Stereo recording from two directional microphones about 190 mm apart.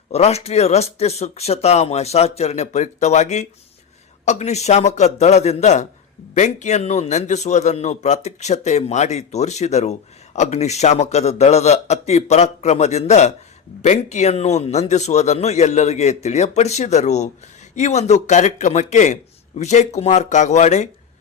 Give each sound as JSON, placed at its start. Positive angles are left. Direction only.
{"t": 0.1, "sound": "a man's voice", "side_deg": 35}